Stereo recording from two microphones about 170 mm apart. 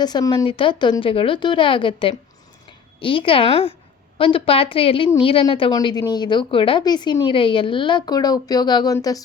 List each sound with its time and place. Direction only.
0.0 s a woman's voice: 25° left (ahead or behind)